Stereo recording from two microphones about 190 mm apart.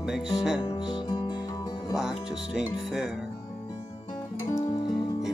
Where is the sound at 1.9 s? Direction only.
5° right (ahead or behind).